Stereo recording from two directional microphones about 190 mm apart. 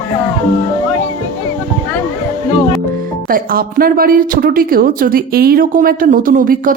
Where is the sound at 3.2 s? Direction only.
50° right (ahead or behind).